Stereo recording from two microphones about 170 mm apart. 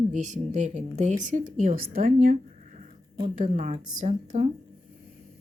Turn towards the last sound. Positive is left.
turn(degrees=-45)  # may be behind; listen again after turning